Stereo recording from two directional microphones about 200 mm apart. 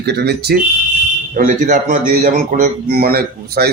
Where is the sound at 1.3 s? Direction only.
40° right (ahead or behind).